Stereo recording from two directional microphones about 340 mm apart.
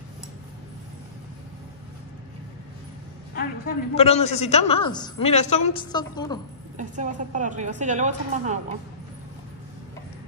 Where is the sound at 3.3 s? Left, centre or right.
Left.